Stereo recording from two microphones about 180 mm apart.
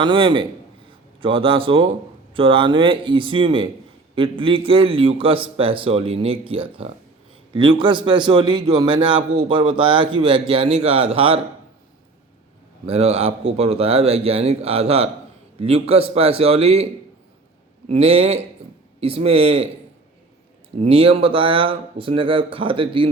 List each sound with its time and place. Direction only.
0.0 s a man's voice: 25° right (ahead or behind)
12.8 s a man's voice: 35° right (ahead or behind)
17.8 s a man's voice: 35° right (ahead or behind)
20.7 s a man's voice: 35° right (ahead or behind)